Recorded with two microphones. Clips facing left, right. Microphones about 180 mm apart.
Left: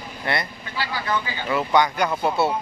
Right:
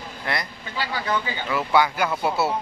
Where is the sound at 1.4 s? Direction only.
5° right (ahead or behind).